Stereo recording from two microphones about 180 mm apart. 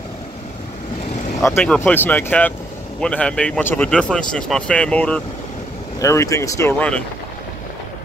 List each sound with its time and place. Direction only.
1.5 s speech: 10° left (ahead or behind)